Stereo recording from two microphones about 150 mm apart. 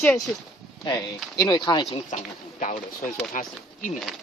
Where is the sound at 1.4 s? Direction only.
30° left (ahead or behind).